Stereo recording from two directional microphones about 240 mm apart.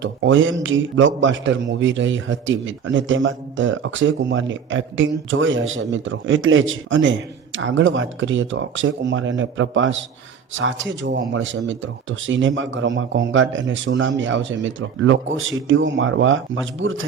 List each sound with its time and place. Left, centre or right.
0.0 s a man's voice: right